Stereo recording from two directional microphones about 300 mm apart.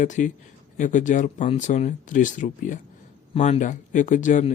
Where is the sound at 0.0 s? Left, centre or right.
Left.